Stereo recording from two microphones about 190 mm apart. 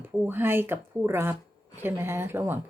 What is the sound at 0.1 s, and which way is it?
Speech, 10° right (ahead or behind).